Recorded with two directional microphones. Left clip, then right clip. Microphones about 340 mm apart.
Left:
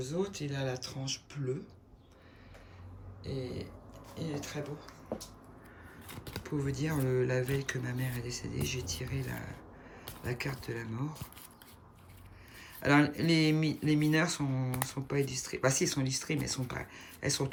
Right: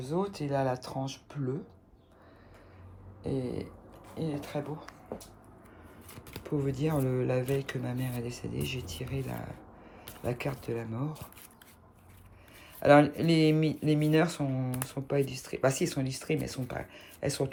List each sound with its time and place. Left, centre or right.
0.0 s speech: centre
3.2 s speech: centre
6.3 s speech: centre
12.6 s speech: centre